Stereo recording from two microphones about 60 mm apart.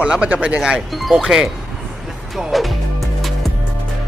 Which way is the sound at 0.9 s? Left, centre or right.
Centre.